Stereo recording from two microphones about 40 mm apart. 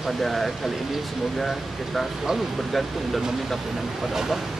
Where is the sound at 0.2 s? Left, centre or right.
Centre.